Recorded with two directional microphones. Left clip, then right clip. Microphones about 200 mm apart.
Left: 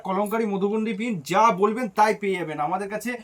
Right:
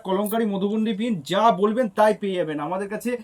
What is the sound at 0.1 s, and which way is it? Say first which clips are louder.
Speech: right 1 dB; 35° left (ahead or behind).